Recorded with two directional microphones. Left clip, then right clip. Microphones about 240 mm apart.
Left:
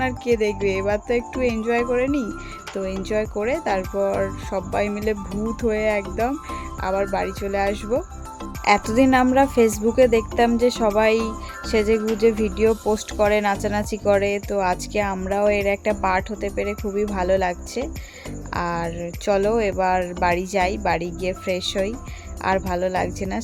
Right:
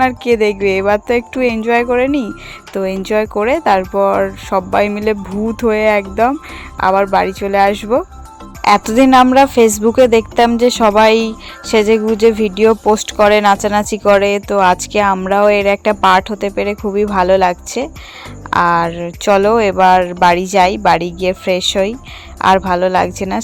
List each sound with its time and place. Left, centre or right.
0.0 s speech: centre